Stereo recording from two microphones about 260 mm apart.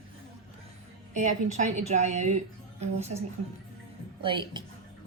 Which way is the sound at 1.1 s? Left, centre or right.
Right.